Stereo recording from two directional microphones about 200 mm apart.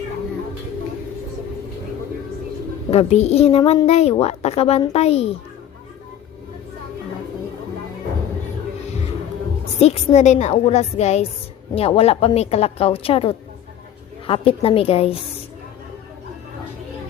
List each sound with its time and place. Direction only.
2.9 s speech: 30° left (ahead or behind)
9.8 s a woman's voice: 35° left (ahead or behind)